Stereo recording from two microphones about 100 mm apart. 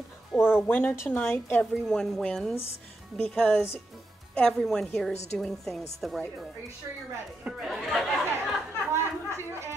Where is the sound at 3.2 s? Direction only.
10° left (ahead or behind).